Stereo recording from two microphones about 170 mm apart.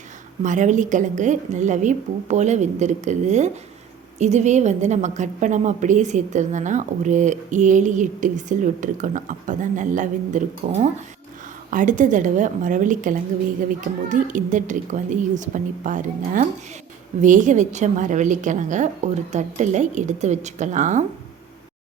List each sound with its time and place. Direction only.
0.4 s a woman's voice: 45° right (ahead or behind)